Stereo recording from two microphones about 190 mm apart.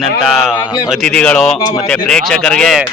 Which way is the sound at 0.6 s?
20° left (ahead or behind).